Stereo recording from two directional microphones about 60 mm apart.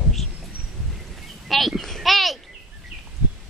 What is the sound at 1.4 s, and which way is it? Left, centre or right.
Speech, centre.